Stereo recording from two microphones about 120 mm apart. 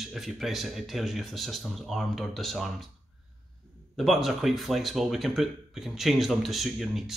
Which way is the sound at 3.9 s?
Centre (ahead or behind).